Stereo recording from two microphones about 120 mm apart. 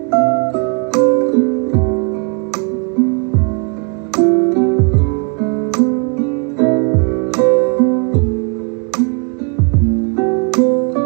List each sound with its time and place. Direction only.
0.1 s music: 20° right (ahead or behind)
4.2 s music: 20° right (ahead or behind)
10.1 s music: 20° right (ahead or behind)